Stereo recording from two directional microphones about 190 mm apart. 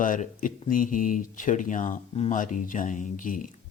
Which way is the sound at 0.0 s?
45° left (ahead or behind).